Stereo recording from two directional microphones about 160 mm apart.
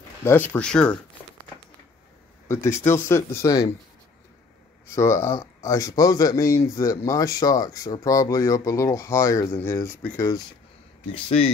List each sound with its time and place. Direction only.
0.2 s speech: 15° left (ahead or behind)
2.4 s speech: 15° left (ahead or behind)
4.8 s speech: 15° left (ahead or behind)
11.1 s speech: 35° left (ahead or behind)